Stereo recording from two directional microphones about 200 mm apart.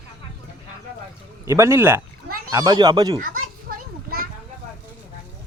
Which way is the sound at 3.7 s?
45° right (ahead or behind).